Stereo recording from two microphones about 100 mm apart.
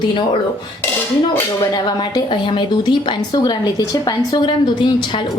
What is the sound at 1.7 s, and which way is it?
A woman's voice, 50° left (ahead or behind).